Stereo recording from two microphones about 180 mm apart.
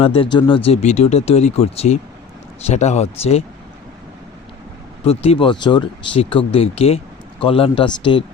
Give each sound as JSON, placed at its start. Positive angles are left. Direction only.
{"t": 0.0, "sound": "speech", "side_deg": 30}
{"t": 5.0, "sound": "speech", "side_deg": 35}